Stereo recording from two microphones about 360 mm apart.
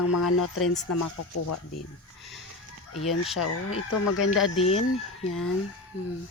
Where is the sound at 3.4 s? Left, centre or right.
Left.